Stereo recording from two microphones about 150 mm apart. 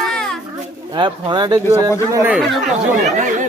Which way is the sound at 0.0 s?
5° left (ahead or behind).